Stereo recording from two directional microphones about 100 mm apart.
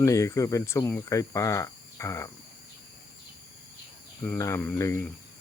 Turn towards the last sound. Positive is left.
turn(degrees=20)  # may be behind; listen again after turning